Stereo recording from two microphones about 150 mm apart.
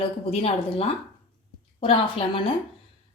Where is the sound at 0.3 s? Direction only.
40° left (ahead or behind).